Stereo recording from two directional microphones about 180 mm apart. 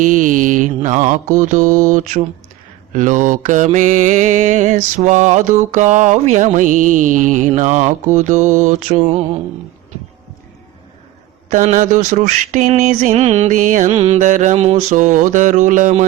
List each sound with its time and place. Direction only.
0.0 s mantra: 45° right (ahead or behind)
11.4 s mantra: 45° right (ahead or behind)